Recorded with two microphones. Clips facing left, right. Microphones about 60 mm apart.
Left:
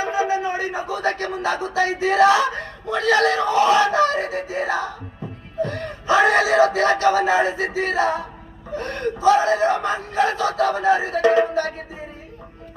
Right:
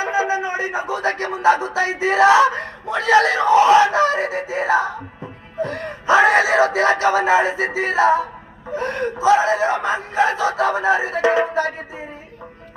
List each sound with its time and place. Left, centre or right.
0.0 s music: centre